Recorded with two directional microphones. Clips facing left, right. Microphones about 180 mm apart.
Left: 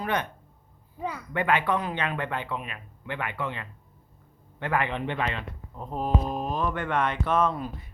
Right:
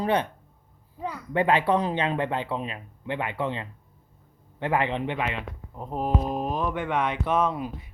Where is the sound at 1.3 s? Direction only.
30° right (ahead or behind).